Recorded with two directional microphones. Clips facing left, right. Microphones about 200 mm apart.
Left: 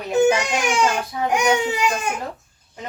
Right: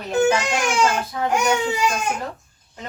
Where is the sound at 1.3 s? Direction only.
15° left (ahead or behind).